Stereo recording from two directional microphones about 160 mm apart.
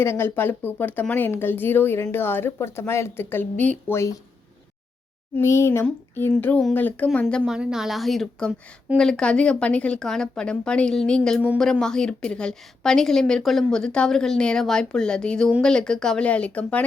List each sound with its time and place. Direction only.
0.0 s speech: 15° left (ahead or behind)
5.4 s a woman's voice: 15° left (ahead or behind)